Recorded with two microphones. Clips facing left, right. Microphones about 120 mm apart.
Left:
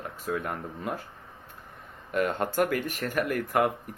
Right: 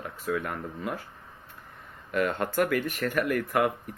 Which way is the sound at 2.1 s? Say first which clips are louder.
Even; 40° left (ahead or behind).